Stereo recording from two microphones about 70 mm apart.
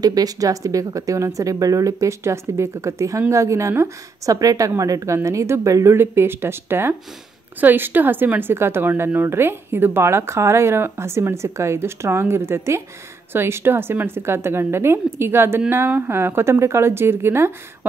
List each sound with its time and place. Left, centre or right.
0.0 s speech: right
5.9 s a woman's voice: right